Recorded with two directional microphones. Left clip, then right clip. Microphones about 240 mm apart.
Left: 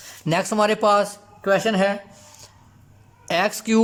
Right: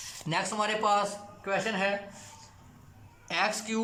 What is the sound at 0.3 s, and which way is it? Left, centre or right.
Speech, left.